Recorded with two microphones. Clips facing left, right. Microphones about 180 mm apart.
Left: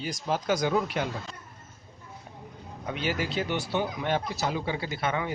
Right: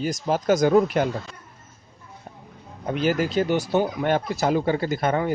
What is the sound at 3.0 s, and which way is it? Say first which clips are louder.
Speech: right 8 dB; 45° right (ahead or behind).